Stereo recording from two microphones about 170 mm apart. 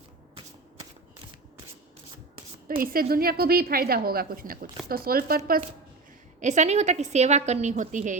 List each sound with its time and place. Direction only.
2.6 s a woman's voice: 60° right (ahead or behind)
6.4 s a woman's voice: 45° right (ahead or behind)